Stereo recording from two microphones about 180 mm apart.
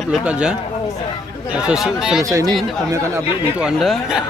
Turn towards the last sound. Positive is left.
turn(degrees=0)  # may be behind; listen again after turning